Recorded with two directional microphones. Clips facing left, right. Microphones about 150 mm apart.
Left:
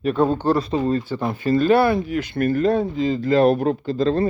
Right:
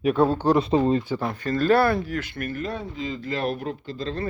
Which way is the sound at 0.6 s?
25° right (ahead or behind).